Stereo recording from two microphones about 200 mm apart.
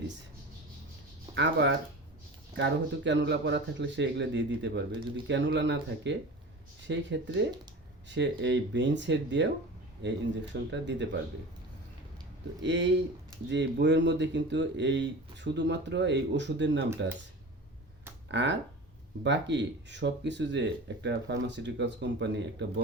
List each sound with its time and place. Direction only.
1.4 s speech: 60° right (ahead or behind)
12.6 s speech: 60° right (ahead or behind)
18.3 s speech: 60° right (ahead or behind)